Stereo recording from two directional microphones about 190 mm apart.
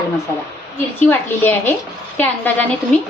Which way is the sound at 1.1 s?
10° left (ahead or behind).